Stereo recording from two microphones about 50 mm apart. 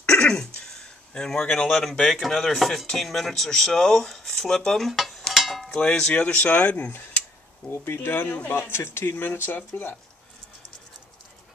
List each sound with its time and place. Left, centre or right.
0.0 s throat clearing: centre
1.1 s speech: centre
1.7 s speech: centre
5.3 s a sound: centre
5.7 s speech: centre
6.3 s speech: left
7.7 s speech: left
8.2 s speech: left
8.5 s speech: left